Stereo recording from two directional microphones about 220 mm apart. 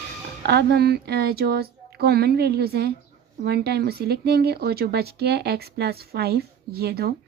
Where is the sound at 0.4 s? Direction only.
50° right (ahead or behind).